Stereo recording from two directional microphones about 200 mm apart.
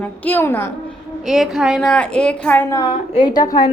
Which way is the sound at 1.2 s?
Centre (ahead or behind).